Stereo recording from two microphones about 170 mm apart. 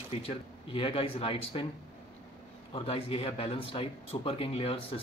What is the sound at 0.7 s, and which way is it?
Speech, 30° left (ahead or behind).